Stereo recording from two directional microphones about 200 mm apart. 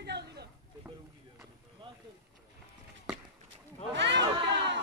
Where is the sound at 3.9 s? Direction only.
60° right (ahead or behind).